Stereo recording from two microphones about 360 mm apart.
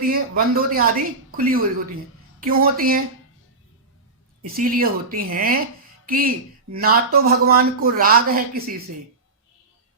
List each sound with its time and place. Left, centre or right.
0.0 s speech: right
4.5 s speech: right